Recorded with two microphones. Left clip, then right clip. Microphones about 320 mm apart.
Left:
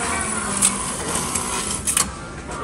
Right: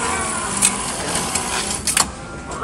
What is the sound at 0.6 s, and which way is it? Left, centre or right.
Printer, centre.